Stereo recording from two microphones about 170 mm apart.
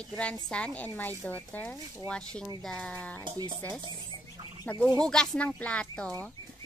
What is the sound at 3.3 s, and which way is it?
Speech, 25° right (ahead or behind).